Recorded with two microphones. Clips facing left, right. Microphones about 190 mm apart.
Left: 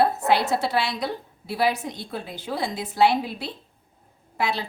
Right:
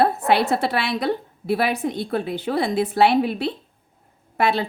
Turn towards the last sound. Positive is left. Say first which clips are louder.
# right 6 dB
turn(degrees=-55)  # may be behind; listen again after turning